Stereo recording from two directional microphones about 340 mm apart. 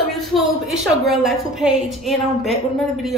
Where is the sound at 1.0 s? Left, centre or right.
Centre.